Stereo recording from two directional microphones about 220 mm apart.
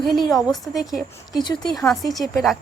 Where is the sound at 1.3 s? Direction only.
20° left (ahead or behind).